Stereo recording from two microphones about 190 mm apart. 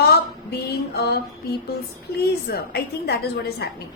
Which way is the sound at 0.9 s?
60° left (ahead or behind).